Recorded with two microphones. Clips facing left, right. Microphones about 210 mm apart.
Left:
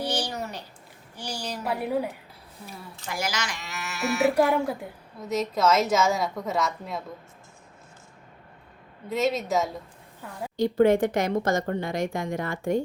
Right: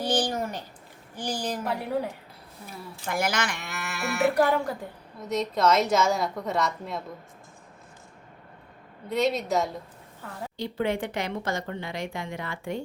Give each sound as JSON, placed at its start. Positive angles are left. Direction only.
{"t": 0.1, "sound": "a sound", "side_deg": -50}
{"t": 1.1, "sound": "a woman's voice", "side_deg": -50}
{"t": 1.6, "sound": "speech", "side_deg": 10}
{"t": 2.6, "sound": "speech", "side_deg": -55}
{"t": 4.3, "sound": "a woman's voice", "side_deg": 5}
{"t": 9.0, "sound": "a woman's voice", "side_deg": 0}
{"t": 10.6, "sound": "speech", "side_deg": 45}